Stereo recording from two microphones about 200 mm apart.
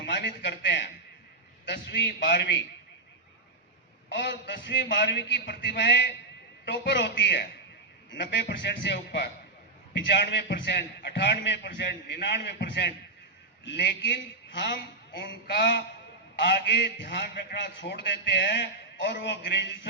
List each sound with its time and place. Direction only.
0.0 s a sound: 60° left (ahead or behind)
1.7 s a man's voice: 60° left (ahead or behind)
4.1 s a man's voice: 60° left (ahead or behind)